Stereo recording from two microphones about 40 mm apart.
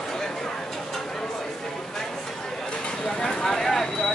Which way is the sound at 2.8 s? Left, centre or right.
Centre.